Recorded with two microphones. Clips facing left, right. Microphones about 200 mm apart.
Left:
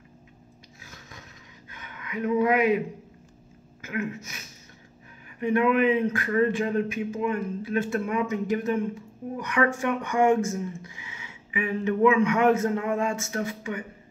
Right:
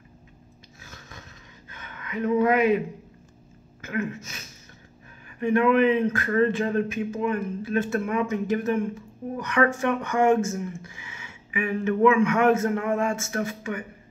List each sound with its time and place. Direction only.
0.7 s a sound: 15° left (ahead or behind)
3.8 s speech: 15° left (ahead or behind)
5.4 s speech: 15° left (ahead or behind)